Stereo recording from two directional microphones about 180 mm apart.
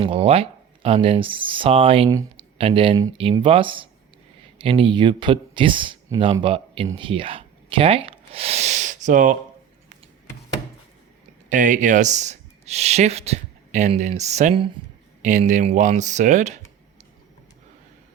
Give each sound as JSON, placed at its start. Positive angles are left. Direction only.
{"t": 0.0, "sound": "speech", "side_deg": -30}
{"t": 6.9, "sound": "a sound", "side_deg": -30}
{"t": 11.4, "sound": "speech", "side_deg": -45}